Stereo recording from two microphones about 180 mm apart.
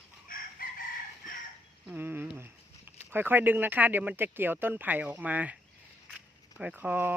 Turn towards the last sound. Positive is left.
turn(degrees=-10)  # may be behind; listen again after turning